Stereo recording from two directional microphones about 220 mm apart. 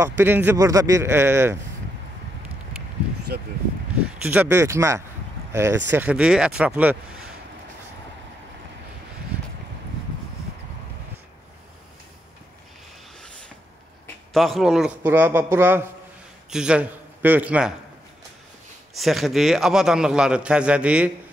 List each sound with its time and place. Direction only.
0.0 s speech: 10° right (ahead or behind)
3.3 s speech: 45° right (ahead or behind)
4.2 s a man's voice: 5° right (ahead or behind)
14.0 s a man's voice: centre (ahead or behind)
18.9 s a man's voice: centre (ahead or behind)